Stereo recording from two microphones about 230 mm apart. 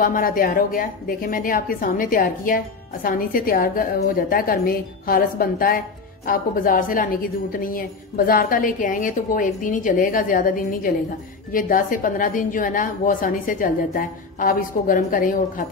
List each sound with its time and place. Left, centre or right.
0.0 s a woman's voice: left